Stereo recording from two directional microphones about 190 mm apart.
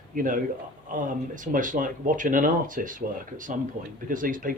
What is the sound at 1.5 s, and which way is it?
Speech, 45° right (ahead or behind).